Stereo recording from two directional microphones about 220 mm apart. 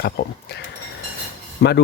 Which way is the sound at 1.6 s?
50° left (ahead or behind).